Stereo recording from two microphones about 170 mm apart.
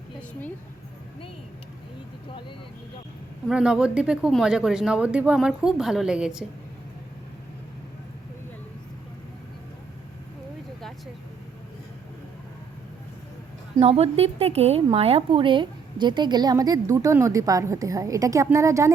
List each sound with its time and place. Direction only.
3.5 s speech: 5° right (ahead or behind)
13.7 s a woman's voice: 35° right (ahead or behind); by 18.9 s 20° right (ahead or behind)